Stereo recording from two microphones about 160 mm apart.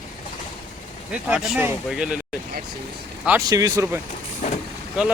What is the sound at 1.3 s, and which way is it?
Speech, centre (ahead or behind).